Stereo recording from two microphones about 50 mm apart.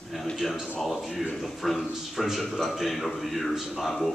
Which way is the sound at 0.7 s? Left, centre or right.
Centre.